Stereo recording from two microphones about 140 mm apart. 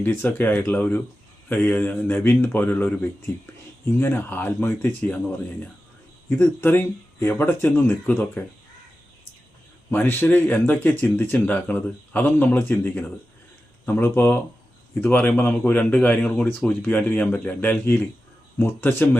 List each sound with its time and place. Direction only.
0.0 s speech: 15° left (ahead or behind)
9.9 s speech: 15° left (ahead or behind)